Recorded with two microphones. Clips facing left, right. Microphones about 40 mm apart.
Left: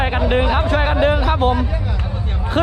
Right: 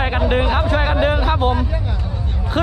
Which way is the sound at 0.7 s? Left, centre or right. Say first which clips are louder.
Left 2 dB; left.